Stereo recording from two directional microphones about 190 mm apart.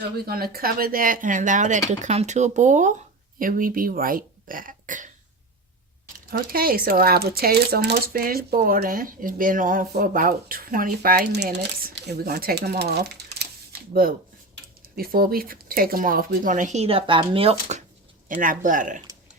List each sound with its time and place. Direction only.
0.3 s speech: 50° right (ahead or behind)
6.3 s speech: 50° right (ahead or behind); by 17.8 s 35° right (ahead or behind)
18.3 s speech: 45° right (ahead or behind)